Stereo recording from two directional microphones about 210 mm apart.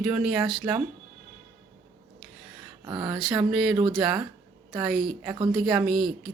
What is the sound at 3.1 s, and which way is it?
Speech, centre (ahead or behind).